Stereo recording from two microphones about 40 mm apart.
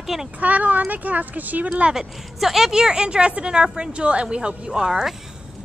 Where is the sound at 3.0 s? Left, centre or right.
Right.